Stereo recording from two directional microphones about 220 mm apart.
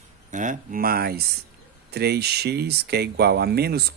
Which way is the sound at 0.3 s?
35° right (ahead or behind).